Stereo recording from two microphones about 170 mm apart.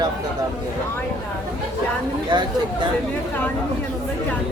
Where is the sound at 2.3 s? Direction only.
25° right (ahead or behind).